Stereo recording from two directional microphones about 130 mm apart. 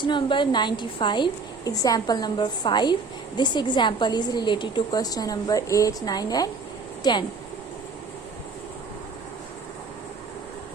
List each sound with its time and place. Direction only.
0.0 s a woman's voice: 35° left (ahead or behind)